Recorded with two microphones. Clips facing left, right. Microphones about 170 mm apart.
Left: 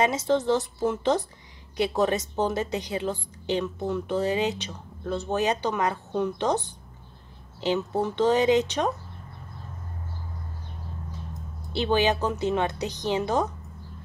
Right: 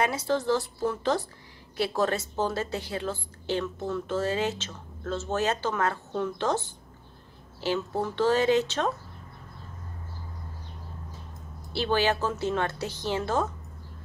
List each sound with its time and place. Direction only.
0.0 s a woman's voice: 20° left (ahead or behind)
11.7 s a woman's voice: 20° left (ahead or behind)